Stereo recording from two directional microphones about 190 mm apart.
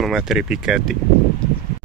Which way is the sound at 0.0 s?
Centre (ahead or behind).